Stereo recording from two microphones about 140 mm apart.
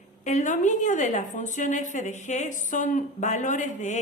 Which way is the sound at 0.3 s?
60° left (ahead or behind).